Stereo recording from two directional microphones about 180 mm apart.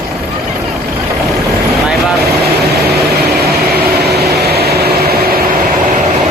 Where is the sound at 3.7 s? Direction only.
65° right (ahead or behind).